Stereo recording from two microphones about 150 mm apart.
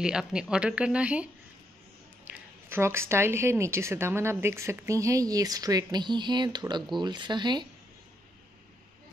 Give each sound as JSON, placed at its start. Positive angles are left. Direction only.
{"t": 0.0, "sound": "speech", "side_deg": -5}
{"t": 2.7, "sound": "a woman's voice", "side_deg": -15}